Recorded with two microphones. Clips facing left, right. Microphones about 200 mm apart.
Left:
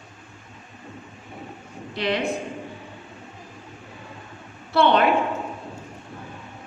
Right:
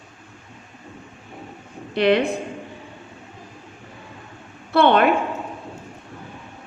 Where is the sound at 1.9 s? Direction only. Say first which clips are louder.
Right 8 dB; 60° right (ahead or behind).